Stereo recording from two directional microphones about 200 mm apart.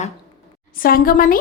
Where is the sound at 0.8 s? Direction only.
45° left (ahead or behind).